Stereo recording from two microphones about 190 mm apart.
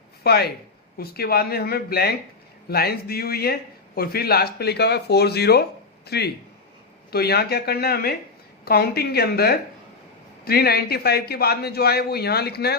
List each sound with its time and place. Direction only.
0.2 s a man's voice: 55° left (ahead or behind)